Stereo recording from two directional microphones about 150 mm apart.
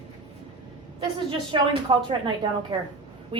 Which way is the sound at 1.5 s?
35° right (ahead or behind).